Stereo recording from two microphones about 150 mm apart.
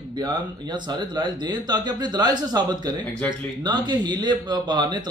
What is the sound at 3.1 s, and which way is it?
Speech, 10° left (ahead or behind).